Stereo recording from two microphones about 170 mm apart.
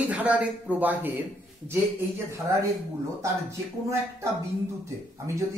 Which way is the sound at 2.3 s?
15° right (ahead or behind).